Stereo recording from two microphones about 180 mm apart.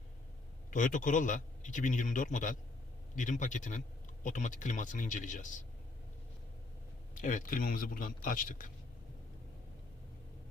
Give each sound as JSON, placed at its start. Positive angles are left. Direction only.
{"t": 0.7, "sound": "a man's voice", "side_deg": 45}
{"t": 7.2, "sound": "a man's voice", "side_deg": 50}